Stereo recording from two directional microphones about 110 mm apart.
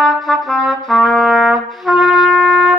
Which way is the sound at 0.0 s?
Centre (ahead or behind).